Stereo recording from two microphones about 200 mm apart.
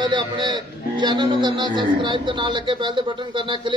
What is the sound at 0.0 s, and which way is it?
A man's voice, 20° right (ahead or behind).